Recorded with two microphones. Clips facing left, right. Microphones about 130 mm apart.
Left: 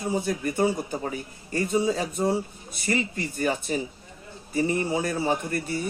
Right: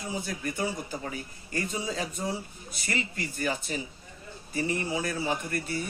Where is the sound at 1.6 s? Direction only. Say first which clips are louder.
Left 11 dB; 55° left (ahead or behind).